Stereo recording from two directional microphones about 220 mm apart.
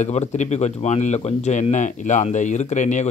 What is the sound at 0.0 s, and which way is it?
Speech, 30° left (ahead or behind).